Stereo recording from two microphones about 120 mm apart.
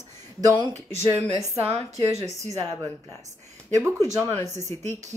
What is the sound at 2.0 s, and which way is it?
Speech, 25° right (ahead or behind).